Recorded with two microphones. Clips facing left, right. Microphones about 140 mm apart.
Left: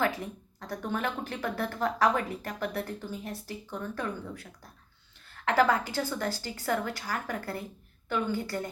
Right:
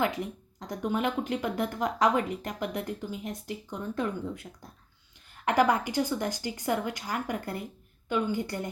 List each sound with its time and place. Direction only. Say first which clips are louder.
0.6 s a woman's voice: right 3 dB; 15° right (ahead or behind)